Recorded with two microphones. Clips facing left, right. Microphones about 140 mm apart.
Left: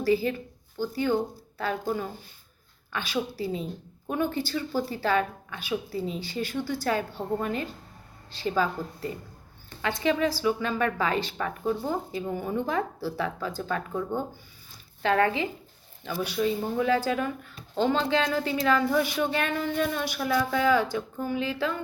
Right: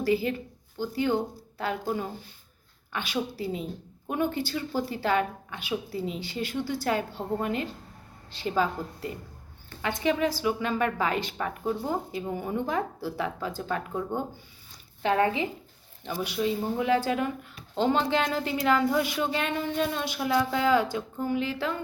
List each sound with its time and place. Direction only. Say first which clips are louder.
0.0 s a woman's voice: left 1 dB; 20° right (ahead or behind)